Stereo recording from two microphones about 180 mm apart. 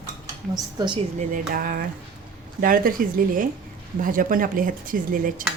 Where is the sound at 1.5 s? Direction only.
50° right (ahead or behind).